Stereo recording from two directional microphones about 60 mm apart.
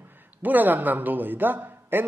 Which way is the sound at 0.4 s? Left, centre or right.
Right.